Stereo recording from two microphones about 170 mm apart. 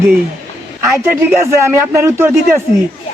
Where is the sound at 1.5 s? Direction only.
15° right (ahead or behind).